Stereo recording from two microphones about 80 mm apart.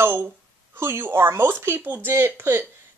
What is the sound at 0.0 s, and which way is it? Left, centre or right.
Speech, right.